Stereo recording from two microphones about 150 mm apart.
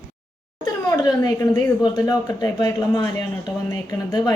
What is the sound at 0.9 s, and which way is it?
A woman's voice, 25° left (ahead or behind).